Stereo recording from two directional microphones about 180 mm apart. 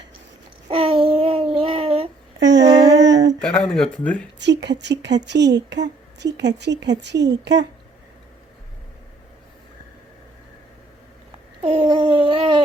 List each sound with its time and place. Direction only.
0.7 s child singing: 30° right (ahead or behind)
2.4 s a sound: 75° right (ahead or behind)
2.6 s humming: 25° right (ahead or behind)
2.9 s humming: 80° right
3.4 s speech: 5° left (ahead or behind)
4.4 s speech: 70° right (ahead or behind)
11.6 s a sound: 30° right (ahead or behind)